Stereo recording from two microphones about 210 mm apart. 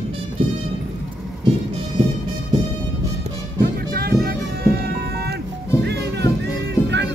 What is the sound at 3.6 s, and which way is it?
Music, 45° right (ahead or behind).